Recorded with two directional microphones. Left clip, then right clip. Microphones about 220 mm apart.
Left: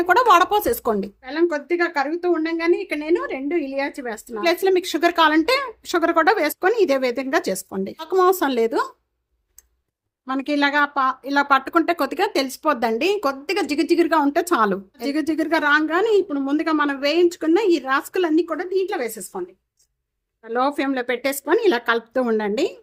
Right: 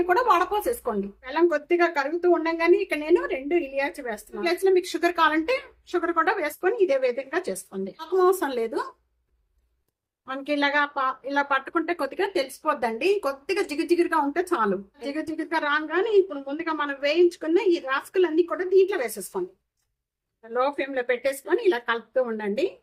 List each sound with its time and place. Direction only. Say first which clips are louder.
0.0 s a woman's voice: left 6 dB; 45° left (ahead or behind)
10.2 s speech: left 4 dB; 50° left (ahead or behind)
20.5 s speech: left 4 dB; 50° left (ahead or behind)